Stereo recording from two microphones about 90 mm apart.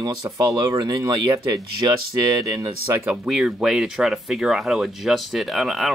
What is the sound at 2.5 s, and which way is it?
Speech, 40° right (ahead or behind).